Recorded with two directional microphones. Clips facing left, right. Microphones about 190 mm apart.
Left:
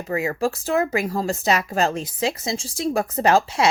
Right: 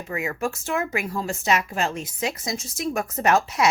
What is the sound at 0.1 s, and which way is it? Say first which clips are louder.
A woman's voice: left 5 dB; 35° left (ahead or behind).